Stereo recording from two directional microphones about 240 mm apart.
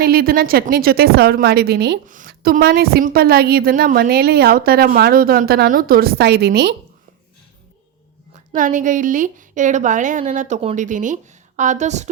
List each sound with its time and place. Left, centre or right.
0.0 s a woman's voice: right
8.5 s a woman's voice: right